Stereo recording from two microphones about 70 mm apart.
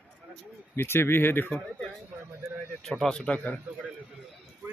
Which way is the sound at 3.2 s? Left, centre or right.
Left.